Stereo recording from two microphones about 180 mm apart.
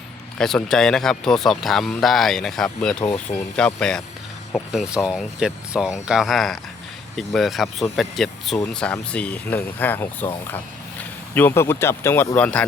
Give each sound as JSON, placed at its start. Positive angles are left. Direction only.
{"t": 0.3, "sound": "speech", "side_deg": 5}
{"t": 3.0, "sound": "speech", "side_deg": 20}
{"t": 3.5, "sound": "speech", "side_deg": 5}
{"t": 11.3, "sound": "speech", "side_deg": 10}